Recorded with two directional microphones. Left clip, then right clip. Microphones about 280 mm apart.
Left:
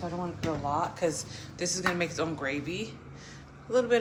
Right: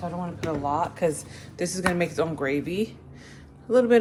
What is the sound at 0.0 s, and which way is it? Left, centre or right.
Speech, right.